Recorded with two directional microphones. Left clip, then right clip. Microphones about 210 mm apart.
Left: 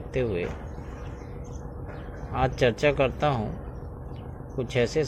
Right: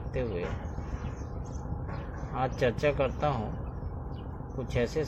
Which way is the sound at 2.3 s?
40° left (ahead or behind).